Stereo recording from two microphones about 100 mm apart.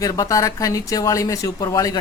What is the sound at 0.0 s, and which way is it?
Speech, 35° left (ahead or behind).